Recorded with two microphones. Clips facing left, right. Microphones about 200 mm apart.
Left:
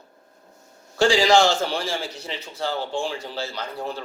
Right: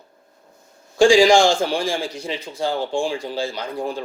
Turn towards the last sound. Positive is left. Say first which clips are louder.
# right 4 dB
turn(degrees=-15)  # may be behind; listen again after turning